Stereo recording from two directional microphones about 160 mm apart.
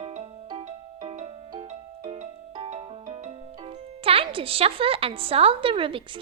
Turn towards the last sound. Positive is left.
turn(degrees=-35)  # may be behind; listen again after turning